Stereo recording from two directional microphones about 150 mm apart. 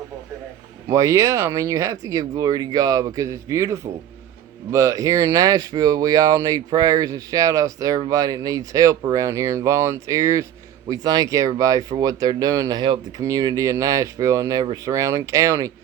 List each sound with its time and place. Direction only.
0.9 s speech: 20° right (ahead or behind)